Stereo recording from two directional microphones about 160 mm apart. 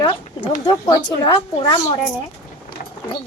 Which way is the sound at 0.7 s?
25° left (ahead or behind).